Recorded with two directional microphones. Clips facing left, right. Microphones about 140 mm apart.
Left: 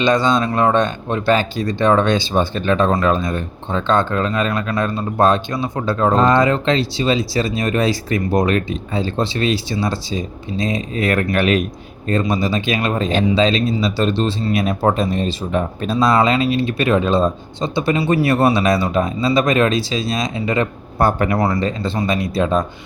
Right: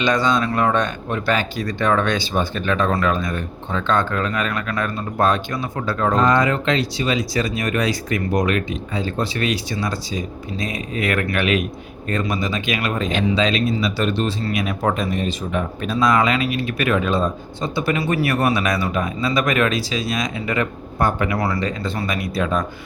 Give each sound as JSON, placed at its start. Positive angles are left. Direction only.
{"t": 0.0, "sound": "speech", "side_deg": 25}